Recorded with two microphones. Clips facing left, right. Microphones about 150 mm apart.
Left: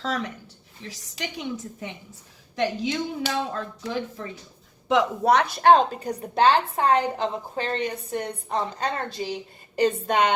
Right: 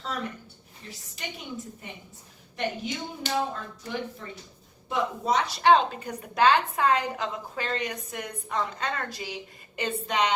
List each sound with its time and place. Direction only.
0.0 s a woman's voice: 90° left
4.9 s a woman's voice: 80° left; by 10.3 s 50° left (ahead or behind)